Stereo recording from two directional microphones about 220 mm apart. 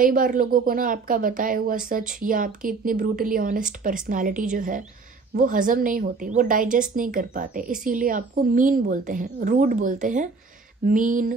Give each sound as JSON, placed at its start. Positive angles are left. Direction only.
{"t": 0.0, "sound": "a woman's voice", "side_deg": -40}